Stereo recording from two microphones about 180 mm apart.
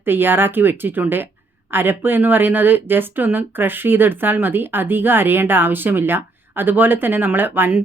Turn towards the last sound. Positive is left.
turn(degrees=-10)  # may be behind; listen again after turning